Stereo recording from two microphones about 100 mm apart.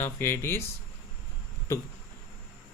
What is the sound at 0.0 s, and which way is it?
Speech, 25° left (ahead or behind).